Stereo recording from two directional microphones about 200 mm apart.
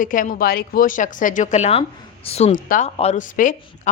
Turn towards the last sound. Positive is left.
turn(degrees=40)  # may be behind; listen again after turning